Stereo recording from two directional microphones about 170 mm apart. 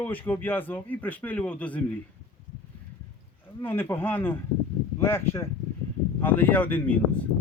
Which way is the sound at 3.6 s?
10° left (ahead or behind).